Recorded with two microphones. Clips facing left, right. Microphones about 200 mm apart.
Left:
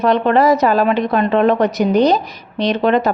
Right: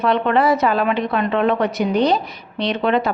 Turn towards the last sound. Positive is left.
turn(degrees=40)  # may be behind; listen again after turning